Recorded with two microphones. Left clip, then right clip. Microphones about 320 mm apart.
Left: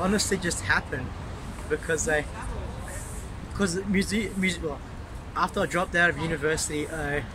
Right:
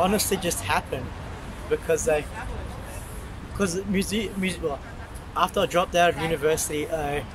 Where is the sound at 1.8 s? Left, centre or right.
Centre.